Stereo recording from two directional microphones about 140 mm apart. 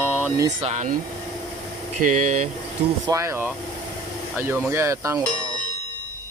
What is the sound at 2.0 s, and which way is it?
Speech, 70° right (ahead or behind).